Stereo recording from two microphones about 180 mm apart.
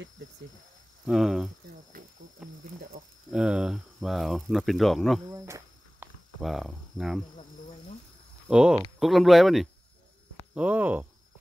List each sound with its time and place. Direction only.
1.0 s speech: centre (ahead or behind)
1.9 s insect: 50° right (ahead or behind)
3.3 s speech: 5° right (ahead or behind)
5.2 s insect: 15° right (ahead or behind)
6.4 s speech: centre (ahead or behind)
8.5 s speech: 5° right (ahead or behind)